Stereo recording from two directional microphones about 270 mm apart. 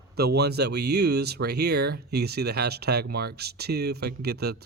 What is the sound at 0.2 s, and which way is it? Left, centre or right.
Speech, right.